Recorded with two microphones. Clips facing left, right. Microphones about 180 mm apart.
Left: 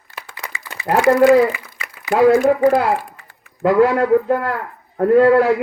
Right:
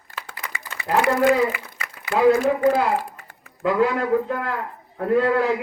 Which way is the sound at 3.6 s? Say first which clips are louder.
Left 6 dB; 45° left (ahead or behind).